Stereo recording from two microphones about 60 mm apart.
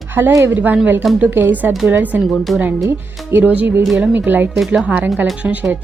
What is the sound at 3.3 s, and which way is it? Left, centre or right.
Speech, right.